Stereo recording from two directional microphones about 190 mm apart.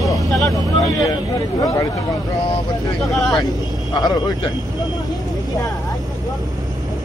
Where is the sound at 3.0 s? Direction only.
Centre (ahead or behind).